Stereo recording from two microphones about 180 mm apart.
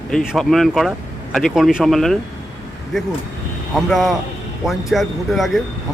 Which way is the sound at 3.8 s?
Centre (ahead or behind).